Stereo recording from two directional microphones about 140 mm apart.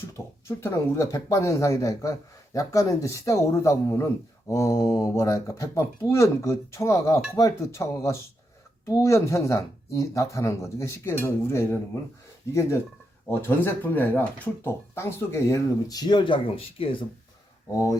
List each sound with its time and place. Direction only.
0.4 s speech: 20° left (ahead or behind)
13.3 s speech: 15° left (ahead or behind); by 17.1 s 40° left (ahead or behind)